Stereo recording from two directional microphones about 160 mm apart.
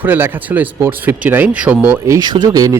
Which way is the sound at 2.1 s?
25° right (ahead or behind).